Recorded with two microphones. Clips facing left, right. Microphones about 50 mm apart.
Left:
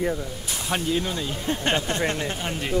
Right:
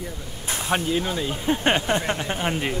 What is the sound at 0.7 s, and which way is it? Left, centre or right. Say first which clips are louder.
Speech: right 2 dB; centre.